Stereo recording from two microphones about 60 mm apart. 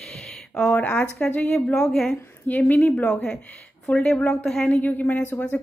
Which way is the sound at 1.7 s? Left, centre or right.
Centre.